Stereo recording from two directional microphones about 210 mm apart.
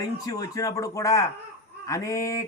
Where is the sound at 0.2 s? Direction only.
15° left (ahead or behind).